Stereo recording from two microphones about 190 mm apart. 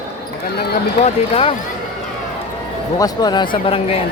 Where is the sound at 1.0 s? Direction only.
30° left (ahead or behind).